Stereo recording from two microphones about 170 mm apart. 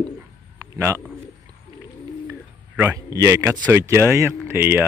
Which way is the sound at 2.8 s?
15° right (ahead or behind).